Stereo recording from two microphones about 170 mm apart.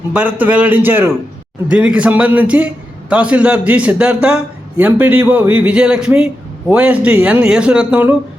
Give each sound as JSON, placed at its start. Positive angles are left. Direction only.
{"t": 0.1, "sound": "a man's voice", "side_deg": -10}